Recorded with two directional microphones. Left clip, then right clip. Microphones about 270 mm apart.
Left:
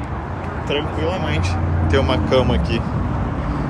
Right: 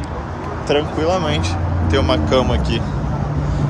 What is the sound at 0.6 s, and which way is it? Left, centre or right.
Speech, centre.